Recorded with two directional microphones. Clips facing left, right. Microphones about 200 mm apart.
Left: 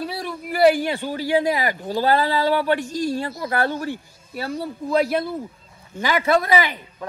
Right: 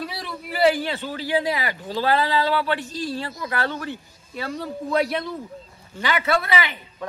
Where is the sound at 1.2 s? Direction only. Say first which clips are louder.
Left 4 dB; 45° left (ahead or behind).